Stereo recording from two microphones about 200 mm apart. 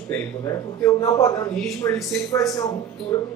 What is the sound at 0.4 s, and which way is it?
Speech, 15° left (ahead or behind).